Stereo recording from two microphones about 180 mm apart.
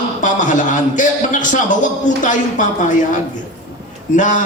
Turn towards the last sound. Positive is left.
turn(degrees=45)  # may be behind; listen again after turning